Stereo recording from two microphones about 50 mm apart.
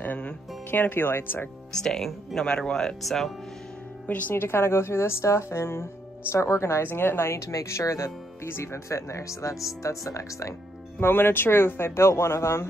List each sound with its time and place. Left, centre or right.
0.7 s speech: left
1.7 s speech: centre
4.1 s speech: left
4.4 s speech: left
6.8 s speech: left
7.3 s speech: left
11.0 s speech: left